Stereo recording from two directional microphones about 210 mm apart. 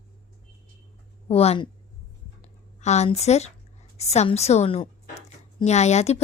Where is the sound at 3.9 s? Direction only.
30° left (ahead or behind).